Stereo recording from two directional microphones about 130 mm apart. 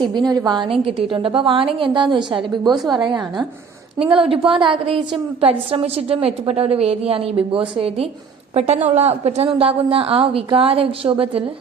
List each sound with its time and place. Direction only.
0.0 s a woman's voice: 35° right (ahead or behind)
0.7 s a woman's voice: 45° right (ahead or behind)
2.7 s a woman's voice: centre (ahead or behind)
3.0 s a woman's voice: 35° right (ahead or behind)
8.5 s a woman's voice: 60° right (ahead or behind)